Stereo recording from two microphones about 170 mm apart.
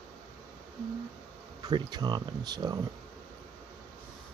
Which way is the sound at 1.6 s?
25° right (ahead or behind).